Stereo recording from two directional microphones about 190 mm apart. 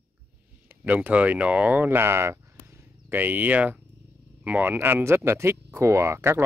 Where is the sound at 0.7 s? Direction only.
10° right (ahead or behind).